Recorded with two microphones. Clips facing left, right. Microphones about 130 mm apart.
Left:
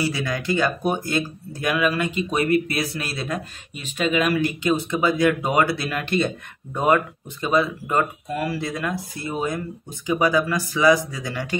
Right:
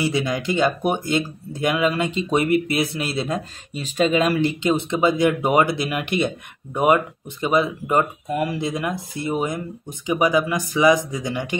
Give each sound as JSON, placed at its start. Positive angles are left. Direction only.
{"t": 0.0, "sound": "speech", "side_deg": -20}